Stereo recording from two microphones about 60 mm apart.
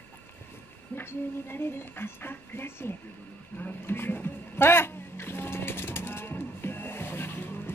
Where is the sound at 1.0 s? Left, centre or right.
Left.